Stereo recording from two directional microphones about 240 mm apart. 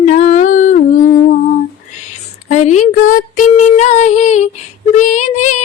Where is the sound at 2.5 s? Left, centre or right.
Left.